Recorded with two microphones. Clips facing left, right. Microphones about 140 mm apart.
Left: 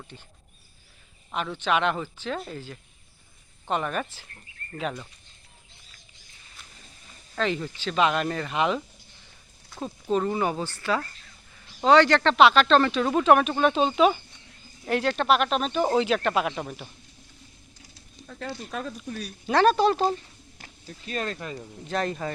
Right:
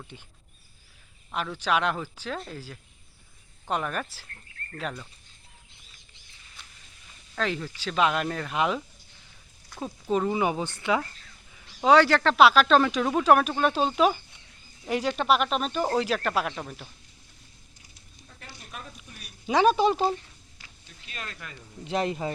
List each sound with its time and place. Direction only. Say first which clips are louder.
0.1 s speech: even; 5° right (ahead or behind)
1.3 s speech: left 1 dB; centre (ahead or behind)
3.7 s speech: left 2 dB; centre (ahead or behind)
6.6 s a sound: even; centre (ahead or behind)
7.3 s speech: left 2 dB; centre (ahead or behind)
9.6 s a sound: left 1 dB; centre (ahead or behind)
10.1 s speech: even; 5° right (ahead or behind)
18.3 s speech: left 12 dB; 85° left
19.5 s speech: left 1 dB; 10° right (ahead or behind)
20.6 s speech: left 11 dB; 40° left (ahead or behind)
21.8 s speech: right 1 dB; 20° right (ahead or behind)